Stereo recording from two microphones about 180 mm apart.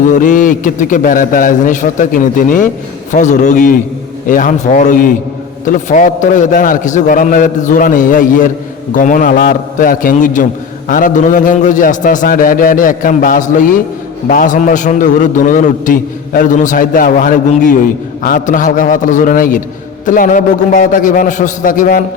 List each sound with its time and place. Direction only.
0.1 s a man's voice: 45° left (ahead or behind)